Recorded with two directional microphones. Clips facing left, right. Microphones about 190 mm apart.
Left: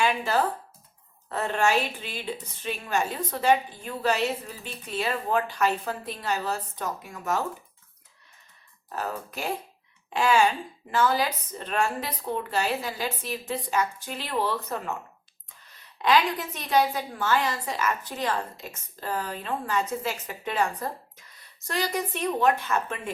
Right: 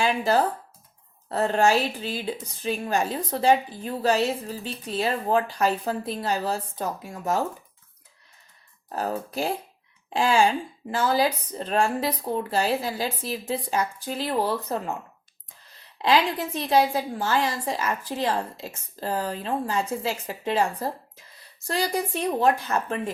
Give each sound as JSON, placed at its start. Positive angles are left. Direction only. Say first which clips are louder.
{"t": 0.0, "sound": "a woman's voice", "louder": "right 3 dB", "side_deg": -40}
{"t": 8.9, "sound": "a woman's voice", "louder": "right 4 dB", "side_deg": -35}
{"t": 16.0, "sound": "a woman's voice", "louder": "right 1 dB", "side_deg": -30}